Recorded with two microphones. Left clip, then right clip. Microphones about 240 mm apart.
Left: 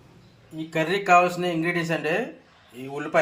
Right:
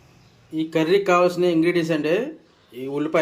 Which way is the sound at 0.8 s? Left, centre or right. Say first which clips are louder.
Right 1 dB; centre.